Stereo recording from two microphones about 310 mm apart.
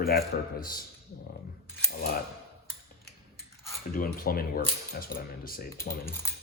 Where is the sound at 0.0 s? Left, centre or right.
Left.